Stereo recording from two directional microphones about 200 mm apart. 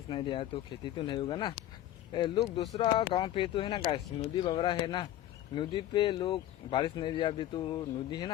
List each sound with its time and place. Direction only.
0.1 s speech: 25° left (ahead or behind)